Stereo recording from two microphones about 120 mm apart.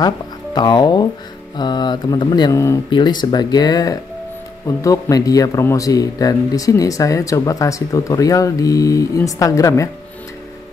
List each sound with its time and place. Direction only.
0.0 s speech: 40° left (ahead or behind)
2.5 s speech: 25° left (ahead or behind)
2.9 s speech: 40° left (ahead or behind)